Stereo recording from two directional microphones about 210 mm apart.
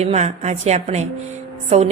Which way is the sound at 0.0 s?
30° right (ahead or behind).